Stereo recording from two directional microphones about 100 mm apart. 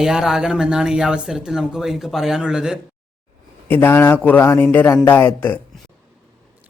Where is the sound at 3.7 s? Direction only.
20° left (ahead or behind).